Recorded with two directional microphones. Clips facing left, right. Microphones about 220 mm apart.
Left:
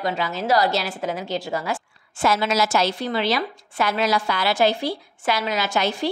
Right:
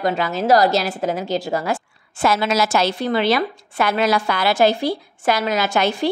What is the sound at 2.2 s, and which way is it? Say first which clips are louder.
A woman's voice: right 2 dB; 60° right (ahead or behind).